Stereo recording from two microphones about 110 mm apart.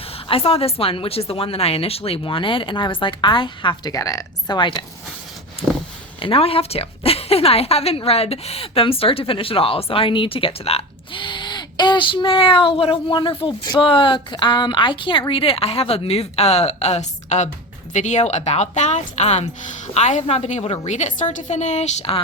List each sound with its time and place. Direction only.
0.3 s speech: 60° left (ahead or behind)
5.6 s a sound: 60° left (ahead or behind)
6.2 s a woman's voice: 60° left (ahead or behind); by 22.2 s 75° left (ahead or behind)